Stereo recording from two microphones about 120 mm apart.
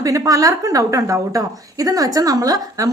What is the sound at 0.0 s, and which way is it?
A woman's voice, 30° right (ahead or behind).